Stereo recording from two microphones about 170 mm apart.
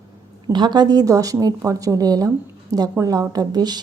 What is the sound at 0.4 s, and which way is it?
Speech, 25° right (ahead or behind).